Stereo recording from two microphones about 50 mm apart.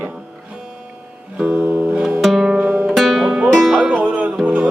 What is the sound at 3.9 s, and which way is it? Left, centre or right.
Music, right.